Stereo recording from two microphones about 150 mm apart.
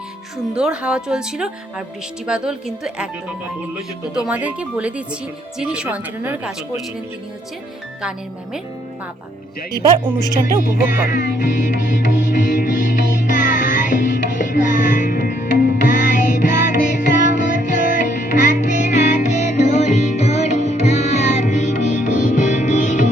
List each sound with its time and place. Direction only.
0.5 s speech: 5° right (ahead or behind)
4.3 s speech: 10° right (ahead or behind)
11.1 s music: 65° left (ahead or behind)